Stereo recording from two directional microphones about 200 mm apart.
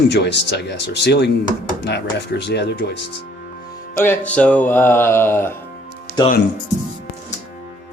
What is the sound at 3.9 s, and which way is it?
Speech, 10° left (ahead or behind).